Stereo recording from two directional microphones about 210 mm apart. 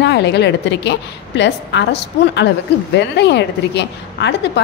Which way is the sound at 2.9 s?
55° left (ahead or behind).